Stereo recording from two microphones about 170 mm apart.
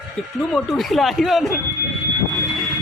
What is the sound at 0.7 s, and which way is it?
Speech, centre (ahead or behind).